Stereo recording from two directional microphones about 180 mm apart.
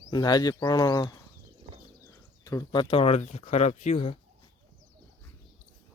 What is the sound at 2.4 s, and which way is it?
Speech, 20° left (ahead or behind).